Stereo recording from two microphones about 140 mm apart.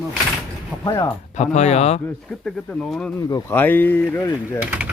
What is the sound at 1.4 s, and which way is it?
Speech, 55° left (ahead or behind).